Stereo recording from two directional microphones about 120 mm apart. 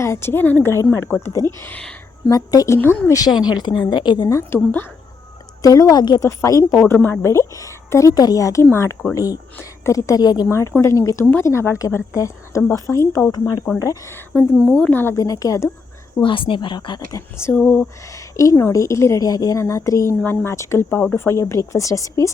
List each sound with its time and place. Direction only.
0.0 s a woman's voice: 20° left (ahead or behind)
2.3 s a woman's voice: 30° left (ahead or behind)
2.7 s a woman's voice: 15° left (ahead or behind)
3.4 s a woman's voice: 35° left (ahead or behind); by 4.9 s 20° left (ahead or behind)
5.6 s a woman's voice: 30° left (ahead or behind)
14.5 s speech: centre (ahead or behind)
14.9 s a woman's voice: 25° left (ahead or behind)
16.2 s a woman's voice: 45° left (ahead or behind)
17.5 s a woman's voice: 10° left (ahead or behind)
18.0 s a woman's voice: 25° left (ahead or behind)